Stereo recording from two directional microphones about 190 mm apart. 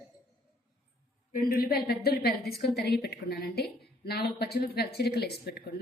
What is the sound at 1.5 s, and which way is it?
A woman's voice, 55° left (ahead or behind).